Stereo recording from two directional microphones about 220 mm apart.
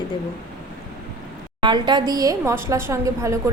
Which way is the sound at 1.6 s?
20° right (ahead or behind).